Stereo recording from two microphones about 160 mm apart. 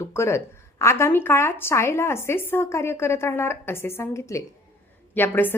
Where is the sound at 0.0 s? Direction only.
15° left (ahead or behind).